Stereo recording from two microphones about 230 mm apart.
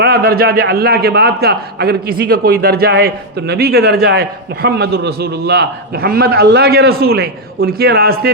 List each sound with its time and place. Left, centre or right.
0.0 s a man's voice: right